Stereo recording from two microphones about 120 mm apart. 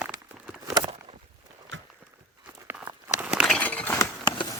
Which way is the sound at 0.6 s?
35° right (ahead or behind).